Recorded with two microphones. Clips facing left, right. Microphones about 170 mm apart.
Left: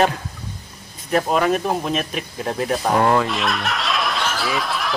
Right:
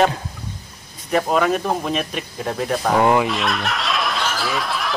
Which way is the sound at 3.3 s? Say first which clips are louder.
Even; centre (ahead or behind).